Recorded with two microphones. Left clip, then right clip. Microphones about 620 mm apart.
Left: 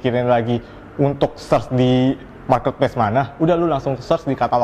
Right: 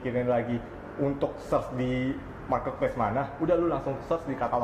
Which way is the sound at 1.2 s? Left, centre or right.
Left.